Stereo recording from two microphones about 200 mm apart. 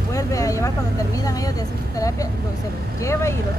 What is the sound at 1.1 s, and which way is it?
Speech, 15° left (ahead or behind).